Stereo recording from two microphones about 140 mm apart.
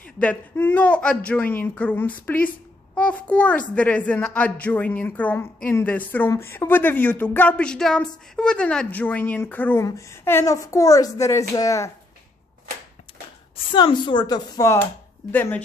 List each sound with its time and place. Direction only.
0.0 s a woman's voice: 10° left (ahead or behind)
13.7 s a woman's voice: 35° left (ahead or behind); by 15.6 s 15° left (ahead or behind)